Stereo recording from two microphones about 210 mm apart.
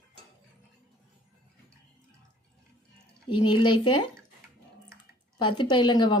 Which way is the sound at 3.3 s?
20° left (ahead or behind).